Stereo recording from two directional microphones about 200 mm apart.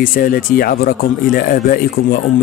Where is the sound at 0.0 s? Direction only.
45° left (ahead or behind).